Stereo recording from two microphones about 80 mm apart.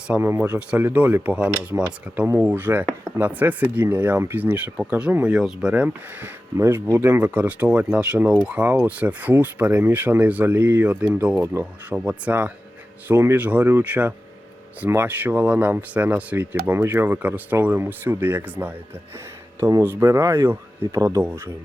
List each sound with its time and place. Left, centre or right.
0.2 s speech: right; by 5.7 s centre
5.7 s speech: centre
19.8 s speech: right